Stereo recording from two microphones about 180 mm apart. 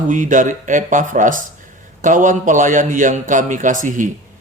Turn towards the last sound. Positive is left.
turn(degrees=-45)  # may be behind; listen again after turning